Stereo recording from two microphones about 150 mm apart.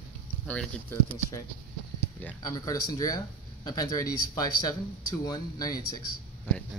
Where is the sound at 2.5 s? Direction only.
25° left (ahead or behind).